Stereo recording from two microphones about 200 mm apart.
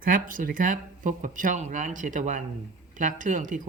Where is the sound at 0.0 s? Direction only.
45° right (ahead or behind).